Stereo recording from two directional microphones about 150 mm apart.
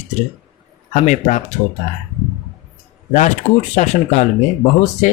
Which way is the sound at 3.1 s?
55° left (ahead or behind).